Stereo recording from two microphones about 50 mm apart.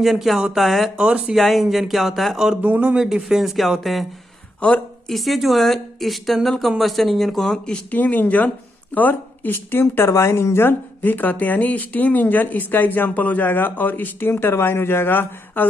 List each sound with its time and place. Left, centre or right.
0.0 s a woman's voice: centre
0.9 s speech: right
1.3 s a woman's voice: centre
2.3 s speech: centre
2.6 s speech: right
3.0 s a woman's voice: centre
4.6 s a woman's voice: left
5.0 s a woman's voice: centre
7.9 s a woman's voice: left
9.5 s speech: left